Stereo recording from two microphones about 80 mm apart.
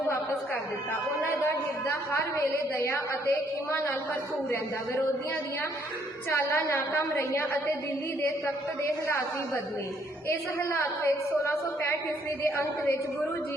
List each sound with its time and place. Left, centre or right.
1.5 s a woman's voice: left
6.3 s a woman's voice: left
10.2 s a woman's voice: left